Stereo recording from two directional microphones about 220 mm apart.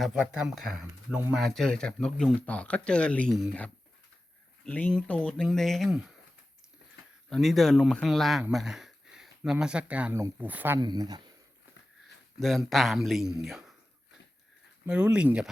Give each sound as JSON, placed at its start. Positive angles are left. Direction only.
{"t": 0.0, "sound": "speech", "side_deg": 0}
{"t": 7.3, "sound": "speech", "side_deg": 0}
{"t": 12.4, "sound": "speech", "side_deg": 0}
{"t": 14.8, "sound": "speech", "side_deg": -5}